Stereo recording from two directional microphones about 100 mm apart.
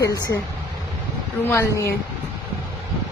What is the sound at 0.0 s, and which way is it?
Speech, 35° left (ahead or behind).